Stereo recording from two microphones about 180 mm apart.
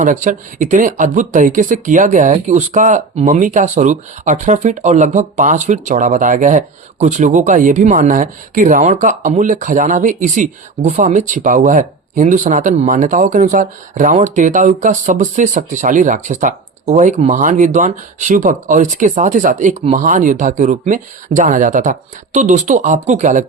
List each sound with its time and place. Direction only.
0.0 s speech: 45° right (ahead or behind)